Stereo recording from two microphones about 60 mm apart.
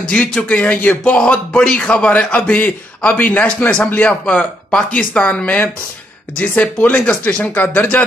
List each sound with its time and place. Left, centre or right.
0.1 s a man's voice: centre
7.5 s speech: left